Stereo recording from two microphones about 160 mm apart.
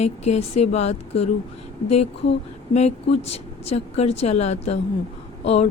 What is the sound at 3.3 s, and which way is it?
A woman's voice, 40° left (ahead or behind).